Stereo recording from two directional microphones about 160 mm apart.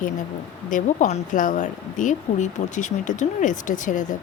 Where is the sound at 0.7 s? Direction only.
50° left (ahead or behind).